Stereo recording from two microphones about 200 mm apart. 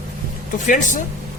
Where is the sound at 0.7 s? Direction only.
40° left (ahead or behind).